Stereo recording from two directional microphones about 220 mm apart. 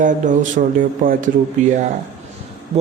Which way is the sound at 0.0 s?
35° right (ahead or behind).